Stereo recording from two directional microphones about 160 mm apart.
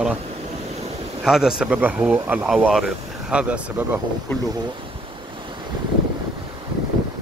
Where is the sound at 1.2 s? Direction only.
5° right (ahead or behind).